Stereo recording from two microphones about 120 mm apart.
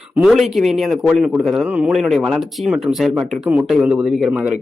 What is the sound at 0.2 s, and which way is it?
A man's voice, centre (ahead or behind).